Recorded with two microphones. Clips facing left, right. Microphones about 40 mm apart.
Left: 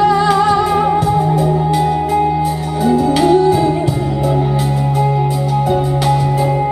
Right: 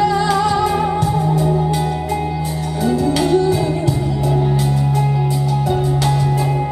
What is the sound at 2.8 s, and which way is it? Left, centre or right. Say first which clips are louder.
Music: left 5 dB; centre.